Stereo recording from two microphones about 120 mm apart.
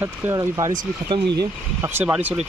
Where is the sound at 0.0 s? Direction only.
30° right (ahead or behind).